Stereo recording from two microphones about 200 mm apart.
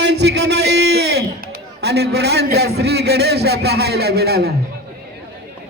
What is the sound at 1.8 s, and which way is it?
A man's voice, 55° right (ahead or behind).